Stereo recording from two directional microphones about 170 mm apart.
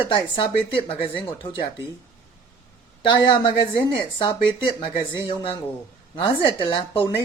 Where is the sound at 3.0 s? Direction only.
25° left (ahead or behind).